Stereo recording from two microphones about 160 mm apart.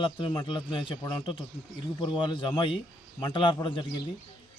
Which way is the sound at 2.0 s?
30° left (ahead or behind).